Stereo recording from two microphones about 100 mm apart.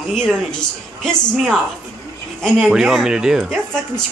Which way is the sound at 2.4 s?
Centre (ahead or behind).